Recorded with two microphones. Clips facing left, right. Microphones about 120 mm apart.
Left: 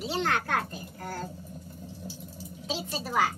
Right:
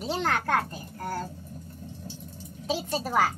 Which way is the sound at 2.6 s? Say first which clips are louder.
Right 5 dB; 45° right (ahead or behind).